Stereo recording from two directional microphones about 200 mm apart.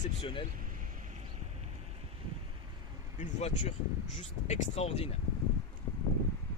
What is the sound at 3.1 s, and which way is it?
Speech, 35° left (ahead or behind).